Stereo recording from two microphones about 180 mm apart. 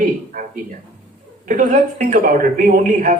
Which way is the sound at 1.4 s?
45° right (ahead or behind).